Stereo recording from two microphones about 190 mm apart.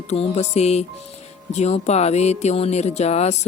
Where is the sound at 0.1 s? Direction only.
35° left (ahead or behind).